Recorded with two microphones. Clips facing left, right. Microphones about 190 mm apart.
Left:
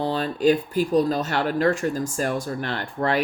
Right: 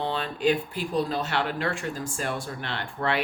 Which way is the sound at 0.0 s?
40° left (ahead or behind).